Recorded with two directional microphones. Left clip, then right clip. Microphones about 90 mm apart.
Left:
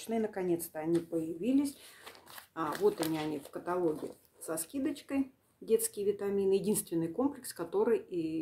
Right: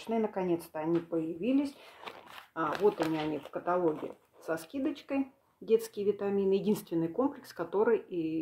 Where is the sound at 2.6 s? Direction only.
15° left (ahead or behind).